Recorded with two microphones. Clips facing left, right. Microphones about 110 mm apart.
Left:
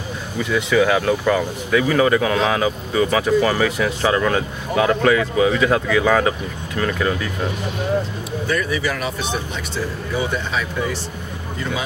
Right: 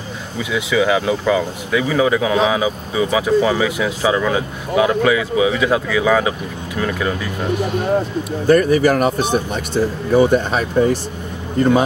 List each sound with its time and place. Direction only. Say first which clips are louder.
0.4 s speech: left 1 dB; 5° right (ahead or behind)
8.5 s speech: right 10 dB; 50° right (ahead or behind)
9.8 s a man's voice: right 10 dB; 40° right (ahead or behind)